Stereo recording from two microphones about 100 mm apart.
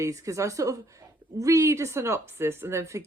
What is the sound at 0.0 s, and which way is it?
A woman's voice, 35° right (ahead or behind).